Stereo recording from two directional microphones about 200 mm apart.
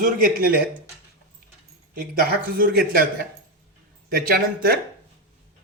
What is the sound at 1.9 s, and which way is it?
Speech, 45° right (ahead or behind).